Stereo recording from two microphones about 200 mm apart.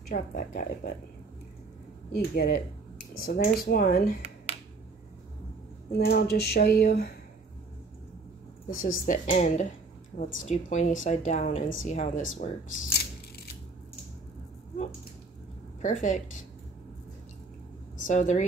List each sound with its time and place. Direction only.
0.1 s speech: 45° left (ahead or behind)
2.1 s speech: 50° left (ahead or behind)
5.9 s speech: 50° left (ahead or behind)
8.6 s speech: 45° left (ahead or behind)
15.8 s speech: 40° left (ahead or behind)
17.9 s speech: 40° left (ahead or behind)